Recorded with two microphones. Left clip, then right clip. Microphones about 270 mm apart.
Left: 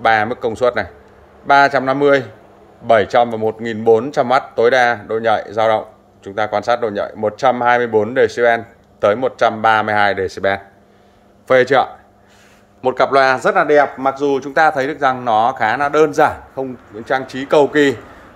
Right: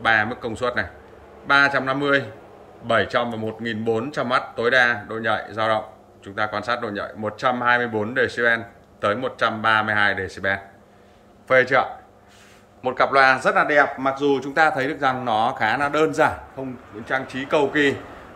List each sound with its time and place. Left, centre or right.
0.0 s a man's voice: centre